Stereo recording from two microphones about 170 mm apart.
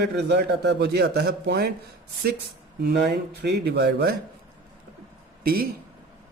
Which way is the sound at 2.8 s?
70° right (ahead or behind).